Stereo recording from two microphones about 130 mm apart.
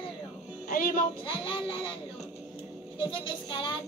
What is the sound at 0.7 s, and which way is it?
Music, 90° left.